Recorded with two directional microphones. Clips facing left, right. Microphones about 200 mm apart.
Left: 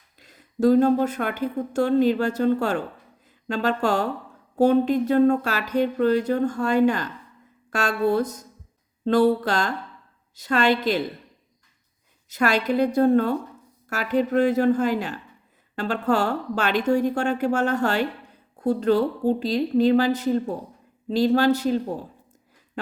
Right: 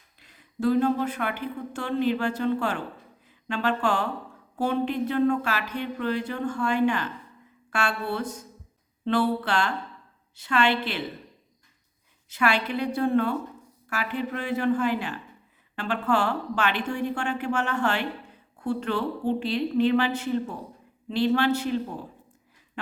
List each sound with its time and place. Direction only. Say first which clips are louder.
0.2 s speech: left 6 dB; 40° left (ahead or behind)
12.3 s speech: left 4 dB; 40° left (ahead or behind)